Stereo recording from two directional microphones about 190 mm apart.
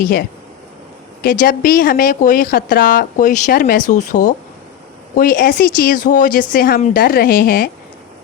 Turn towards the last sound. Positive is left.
turn(degrees=50)  # may be behind; listen again after turning